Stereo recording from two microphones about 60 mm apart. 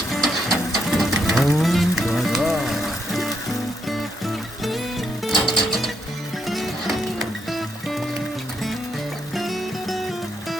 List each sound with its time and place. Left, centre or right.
0.1 s music: centre
9.3 s music: centre